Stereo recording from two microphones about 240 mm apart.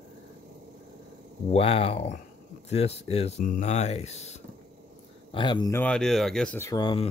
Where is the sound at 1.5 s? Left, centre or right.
Left.